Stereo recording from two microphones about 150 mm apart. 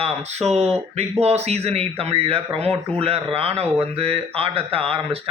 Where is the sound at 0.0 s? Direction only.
45° right (ahead or behind).